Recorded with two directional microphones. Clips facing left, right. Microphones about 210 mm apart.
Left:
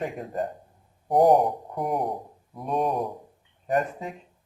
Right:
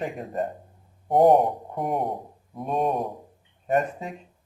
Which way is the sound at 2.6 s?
Centre (ahead or behind).